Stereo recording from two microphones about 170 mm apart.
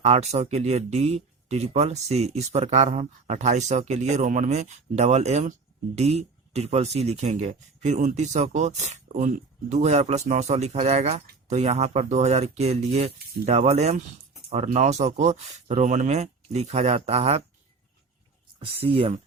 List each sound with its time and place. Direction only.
0.0 s speech: 40° right (ahead or behind)
18.6 s speech: 35° right (ahead or behind)